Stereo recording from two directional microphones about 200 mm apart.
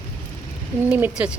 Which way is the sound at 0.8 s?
5° right (ahead or behind).